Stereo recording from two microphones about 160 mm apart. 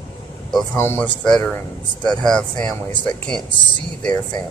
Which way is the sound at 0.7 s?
10° left (ahead or behind).